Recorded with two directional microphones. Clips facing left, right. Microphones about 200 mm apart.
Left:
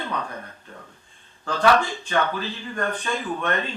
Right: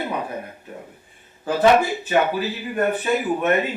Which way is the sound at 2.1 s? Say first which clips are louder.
Right 4 dB; 10° right (ahead or behind).